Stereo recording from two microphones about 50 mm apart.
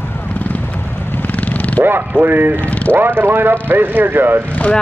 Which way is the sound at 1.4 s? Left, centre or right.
Left.